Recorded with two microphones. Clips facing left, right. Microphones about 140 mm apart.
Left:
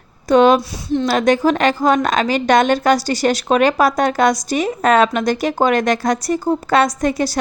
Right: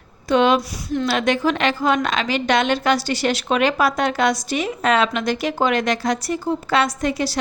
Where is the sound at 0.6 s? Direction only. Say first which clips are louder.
Left 4 dB; 25° left (ahead or behind).